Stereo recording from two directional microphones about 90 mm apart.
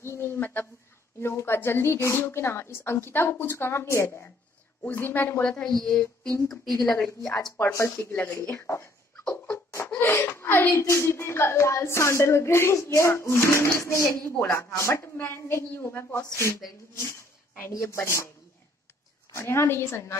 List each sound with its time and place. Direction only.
0.0 s a sound: 30° left (ahead or behind)
1.2 s a woman's voice: 25° left (ahead or behind)
5.4 s a woman's voice: 10° left (ahead or behind)
7.5 s a woman's voice: 25° left (ahead or behind)
8.4 s speech: 30° left (ahead or behind)
9.2 s a sound: 15° left (ahead or behind)
10.8 s a woman's voice: 30° left (ahead or behind)
16.5 s speech: 40° left (ahead or behind)
17.6 s a woman's voice: 30° left (ahead or behind)
19.3 s a woman's voice: 30° left (ahead or behind)